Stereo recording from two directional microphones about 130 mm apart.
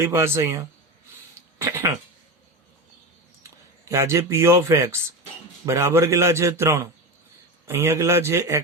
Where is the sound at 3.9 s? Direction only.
20° right (ahead or behind).